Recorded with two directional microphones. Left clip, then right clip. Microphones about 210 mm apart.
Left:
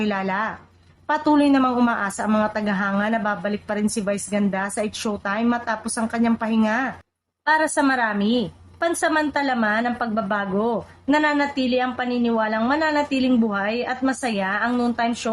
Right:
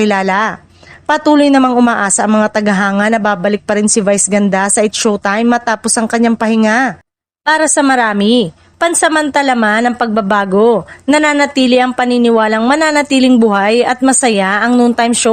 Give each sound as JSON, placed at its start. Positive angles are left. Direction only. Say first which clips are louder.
{"t": 0.0, "sound": "a woman's voice", "louder": "right 12 dB", "side_deg": -45}